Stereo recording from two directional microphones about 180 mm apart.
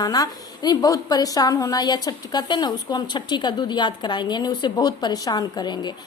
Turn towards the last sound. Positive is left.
turn(degrees=25)  # may be behind; listen again after turning